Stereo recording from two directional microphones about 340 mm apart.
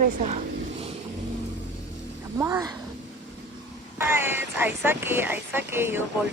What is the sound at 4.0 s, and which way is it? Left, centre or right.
Speech, centre.